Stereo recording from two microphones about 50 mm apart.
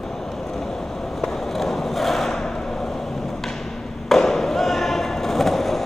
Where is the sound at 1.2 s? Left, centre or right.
Centre.